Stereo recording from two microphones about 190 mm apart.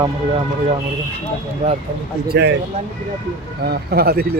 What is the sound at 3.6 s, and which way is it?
Speech, 55° right (ahead or behind).